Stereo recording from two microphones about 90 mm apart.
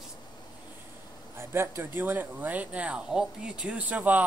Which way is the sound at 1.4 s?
25° right (ahead or behind).